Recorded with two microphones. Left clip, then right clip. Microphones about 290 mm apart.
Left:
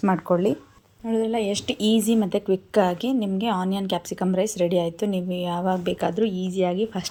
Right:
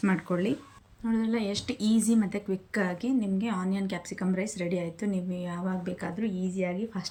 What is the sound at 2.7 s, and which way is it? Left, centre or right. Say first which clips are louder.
A woman's voice: left 8 dB; centre.